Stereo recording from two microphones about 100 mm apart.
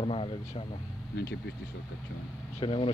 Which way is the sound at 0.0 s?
65° left (ahead or behind).